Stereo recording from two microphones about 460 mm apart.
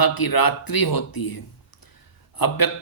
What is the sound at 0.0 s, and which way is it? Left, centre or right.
A man's voice, left.